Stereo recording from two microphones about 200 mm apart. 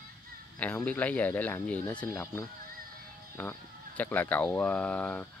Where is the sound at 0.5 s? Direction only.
10° left (ahead or behind).